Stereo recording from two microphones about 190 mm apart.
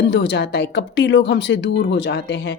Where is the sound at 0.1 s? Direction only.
70° left (ahead or behind).